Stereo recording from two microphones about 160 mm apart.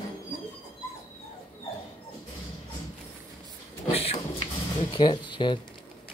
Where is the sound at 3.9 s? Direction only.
35° left (ahead or behind).